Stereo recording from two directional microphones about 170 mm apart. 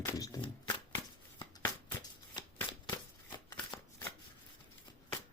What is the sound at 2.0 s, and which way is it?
Shuffling cards, 25° left (ahead or behind).